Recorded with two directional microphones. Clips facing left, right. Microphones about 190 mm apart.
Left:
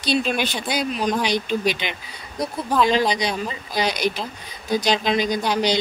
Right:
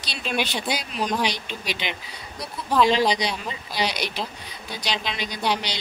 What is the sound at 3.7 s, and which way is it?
Speech, 45° left (ahead or behind).